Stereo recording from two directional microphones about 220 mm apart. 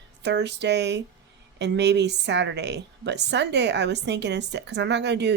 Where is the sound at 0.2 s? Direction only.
50° right (ahead or behind).